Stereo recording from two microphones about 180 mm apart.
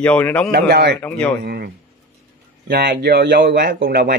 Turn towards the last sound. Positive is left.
turn(degrees=-60)  # may be behind; listen again after turning